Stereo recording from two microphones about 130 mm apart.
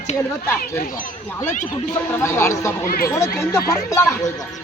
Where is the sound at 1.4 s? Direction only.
75° left (ahead or behind).